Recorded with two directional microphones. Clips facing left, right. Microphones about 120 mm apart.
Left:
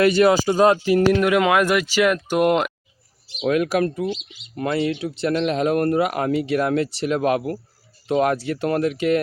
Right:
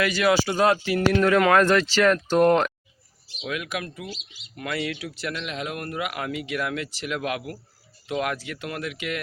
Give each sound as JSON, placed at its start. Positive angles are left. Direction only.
{"t": 0.0, "sound": "speech", "side_deg": 30}
{"t": 3.4, "sound": "speech", "side_deg": 45}
{"t": 5.3, "sound": "speech", "side_deg": 40}